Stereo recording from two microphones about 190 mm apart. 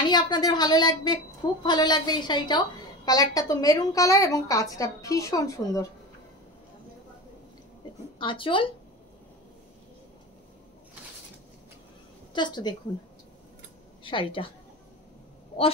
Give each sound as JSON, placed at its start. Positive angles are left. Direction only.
{"t": 0.0, "sound": "a woman's voice", "side_deg": 25}
{"t": 8.2, "sound": "a woman's voice", "side_deg": 25}
{"t": 12.4, "sound": "a woman's voice", "side_deg": 25}
{"t": 14.0, "sound": "a woman's voice", "side_deg": 25}